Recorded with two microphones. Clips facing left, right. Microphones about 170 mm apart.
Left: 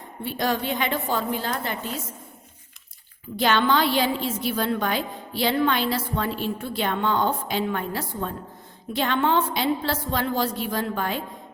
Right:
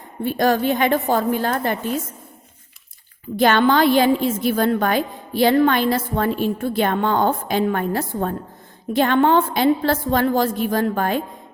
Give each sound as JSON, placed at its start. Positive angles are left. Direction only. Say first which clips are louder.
{"t": 0.3, "sound": "a woman's voice", "louder": "right 7 dB", "side_deg": -50}
{"t": 3.3, "sound": "a woman's voice", "louder": "right 5 dB", "side_deg": -50}